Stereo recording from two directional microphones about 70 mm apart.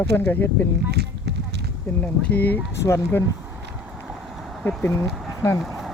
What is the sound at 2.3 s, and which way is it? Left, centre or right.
Speech, left.